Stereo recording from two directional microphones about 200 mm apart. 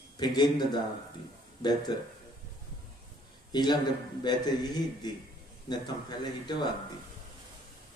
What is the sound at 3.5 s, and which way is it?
A man's voice, 20° left (ahead or behind).